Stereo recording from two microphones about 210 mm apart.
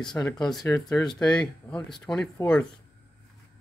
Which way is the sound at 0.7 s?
10° left (ahead or behind).